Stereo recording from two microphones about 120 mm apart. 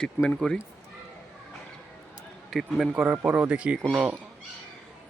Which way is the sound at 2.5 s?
Centre (ahead or behind).